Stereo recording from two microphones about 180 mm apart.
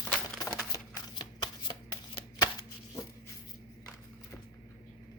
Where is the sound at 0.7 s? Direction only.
25° left (ahead or behind).